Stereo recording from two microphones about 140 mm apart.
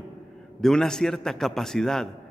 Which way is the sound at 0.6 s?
5° left (ahead or behind).